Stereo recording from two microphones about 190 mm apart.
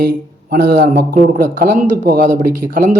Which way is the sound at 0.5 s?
55° right (ahead or behind).